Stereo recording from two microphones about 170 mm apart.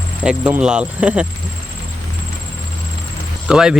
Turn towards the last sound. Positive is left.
turn(degrees=-5)  # may be behind; listen again after turning